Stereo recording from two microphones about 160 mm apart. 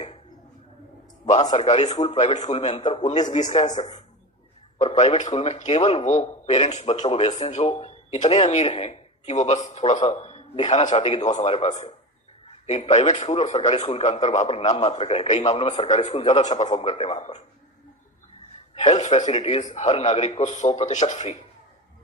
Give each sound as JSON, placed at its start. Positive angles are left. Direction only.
{"t": 1.5, "sound": "a man's voice", "side_deg": 40}
{"t": 4.8, "sound": "a man's voice", "side_deg": 40}
{"t": 18.7, "sound": "a man's voice", "side_deg": 40}
{"t": 19.2, "sound": "a man's voice", "side_deg": 30}